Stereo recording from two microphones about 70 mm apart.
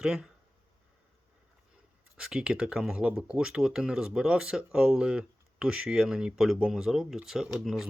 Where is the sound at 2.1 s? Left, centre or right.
Centre.